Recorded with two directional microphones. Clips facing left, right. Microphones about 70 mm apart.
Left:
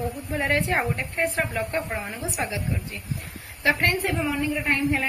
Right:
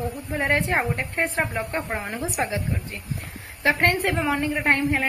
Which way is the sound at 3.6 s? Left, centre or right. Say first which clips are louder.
Right 2 dB; right.